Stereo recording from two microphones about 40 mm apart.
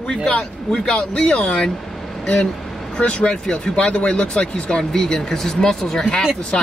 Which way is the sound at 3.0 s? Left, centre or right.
Left.